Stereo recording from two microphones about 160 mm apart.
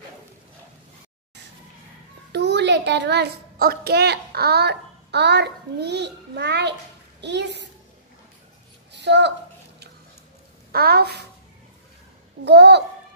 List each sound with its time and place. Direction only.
2.3 s a child's voice: 90° right
8.9 s a child's voice: 90° right
10.7 s speech: 70° right (ahead or behind)
12.4 s a child's voice: 90° right